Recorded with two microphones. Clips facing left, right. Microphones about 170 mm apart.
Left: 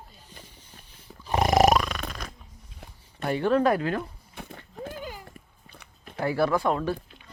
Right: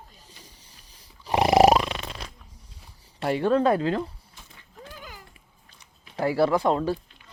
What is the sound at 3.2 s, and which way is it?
Speech, 30° right (ahead or behind).